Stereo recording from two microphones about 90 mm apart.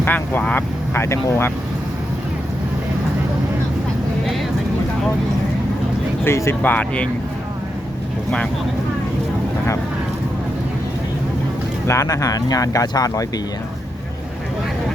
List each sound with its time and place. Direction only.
0.0 s speech: 20° left (ahead or behind)
6.2 s speech: 30° left (ahead or behind)
6.6 s speech: 20° left (ahead or behind)
11.9 s speech: 35° left (ahead or behind)